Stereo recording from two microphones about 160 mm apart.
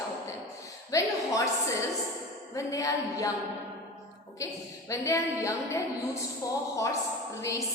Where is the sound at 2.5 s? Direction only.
20° left (ahead or behind).